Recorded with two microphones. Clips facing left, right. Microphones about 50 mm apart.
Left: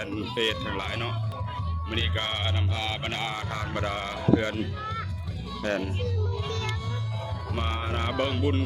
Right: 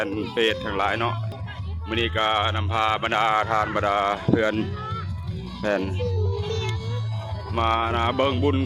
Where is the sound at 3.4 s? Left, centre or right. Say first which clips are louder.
Right 9 dB; right.